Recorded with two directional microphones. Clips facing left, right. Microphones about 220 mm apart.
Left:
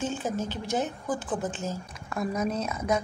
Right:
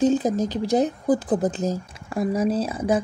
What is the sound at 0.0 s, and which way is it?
A woman's voice, 35° right (ahead or behind).